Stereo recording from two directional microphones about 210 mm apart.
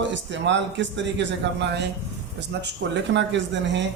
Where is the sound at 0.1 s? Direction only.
60° right (ahead or behind).